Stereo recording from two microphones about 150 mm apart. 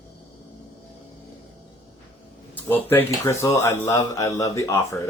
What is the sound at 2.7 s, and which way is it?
Speech, 15° left (ahead or behind).